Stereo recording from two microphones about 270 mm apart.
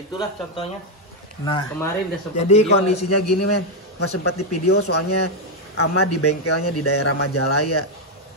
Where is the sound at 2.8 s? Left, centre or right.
Left.